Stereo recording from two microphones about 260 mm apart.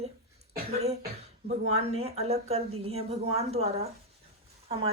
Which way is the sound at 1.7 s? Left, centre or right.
Right.